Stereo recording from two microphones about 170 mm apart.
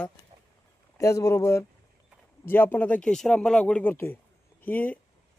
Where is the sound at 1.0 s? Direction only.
20° left (ahead or behind).